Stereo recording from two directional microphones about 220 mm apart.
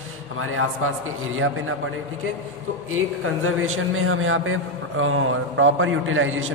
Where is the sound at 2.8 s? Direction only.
70° right (ahead or behind).